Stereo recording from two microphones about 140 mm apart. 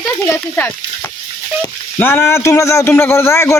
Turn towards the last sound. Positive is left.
turn(degrees=20)  # may be behind; listen again after turning